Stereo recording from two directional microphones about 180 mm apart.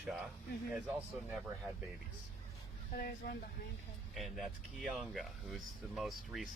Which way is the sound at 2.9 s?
55° left (ahead or behind).